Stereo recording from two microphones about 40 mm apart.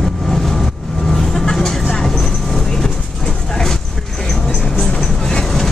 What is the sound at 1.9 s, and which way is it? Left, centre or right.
Train, centre.